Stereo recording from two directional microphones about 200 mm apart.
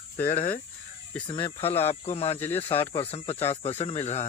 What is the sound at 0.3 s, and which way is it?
Speech, 40° left (ahead or behind).